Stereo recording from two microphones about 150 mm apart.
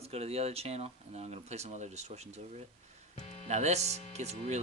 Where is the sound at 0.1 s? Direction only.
45° right (ahead or behind).